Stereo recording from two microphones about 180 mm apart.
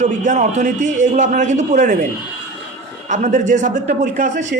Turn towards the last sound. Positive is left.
turn(degrees=-45)  # may be behind; listen again after turning